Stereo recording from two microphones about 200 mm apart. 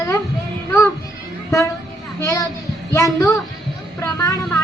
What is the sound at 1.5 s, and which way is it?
Speech, 15° left (ahead or behind).